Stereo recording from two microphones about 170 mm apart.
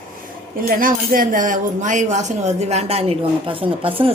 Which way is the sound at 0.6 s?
55° right (ahead or behind).